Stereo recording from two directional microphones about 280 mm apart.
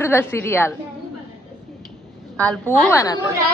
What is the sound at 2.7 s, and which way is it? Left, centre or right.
Speech, centre.